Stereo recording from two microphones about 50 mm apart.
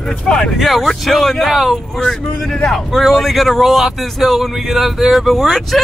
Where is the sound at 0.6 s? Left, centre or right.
Centre.